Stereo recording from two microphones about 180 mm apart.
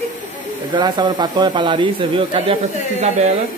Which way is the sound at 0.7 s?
25° right (ahead or behind).